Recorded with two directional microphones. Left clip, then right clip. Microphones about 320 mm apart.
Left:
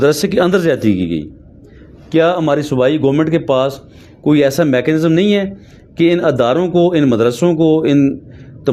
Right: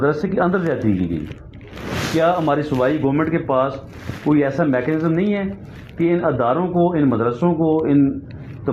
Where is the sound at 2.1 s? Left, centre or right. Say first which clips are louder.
Left 5 dB; left.